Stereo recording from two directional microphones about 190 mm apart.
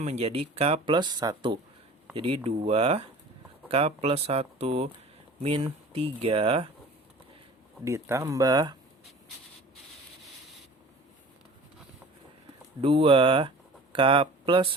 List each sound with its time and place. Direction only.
0.0 s speech: 35° right (ahead or behind)
7.9 s speech: 15° right (ahead or behind)
12.8 s speech: 30° right (ahead or behind)